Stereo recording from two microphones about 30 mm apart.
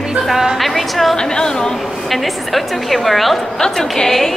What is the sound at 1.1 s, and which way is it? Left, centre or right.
Speech, left.